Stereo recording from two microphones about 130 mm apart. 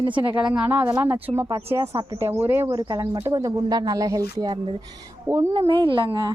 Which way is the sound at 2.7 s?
30° right (ahead or behind).